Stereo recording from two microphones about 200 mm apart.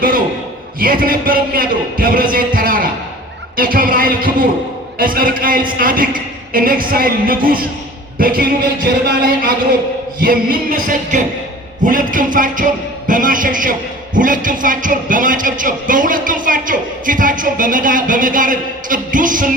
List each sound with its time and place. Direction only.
0.8 s a man's voice: 45° right (ahead or behind)